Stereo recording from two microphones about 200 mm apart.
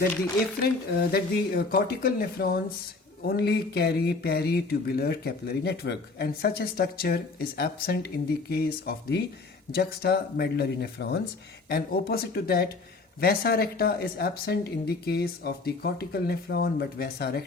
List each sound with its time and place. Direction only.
0.9 s speech: 50° left (ahead or behind)